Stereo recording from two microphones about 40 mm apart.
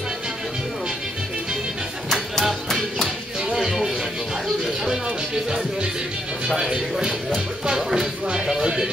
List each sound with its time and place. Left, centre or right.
2.4 s music: centre
3.5 s music: centre
4.8 s music: centre
6.4 s speech: centre
7.6 s music: centre